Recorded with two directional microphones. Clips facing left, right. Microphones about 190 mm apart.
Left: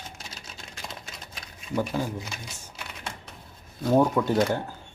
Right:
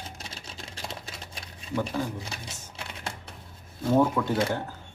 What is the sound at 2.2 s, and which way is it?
Shuffling cards, 30° right (ahead or behind).